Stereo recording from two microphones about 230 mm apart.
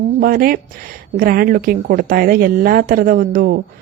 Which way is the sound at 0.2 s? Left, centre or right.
Right.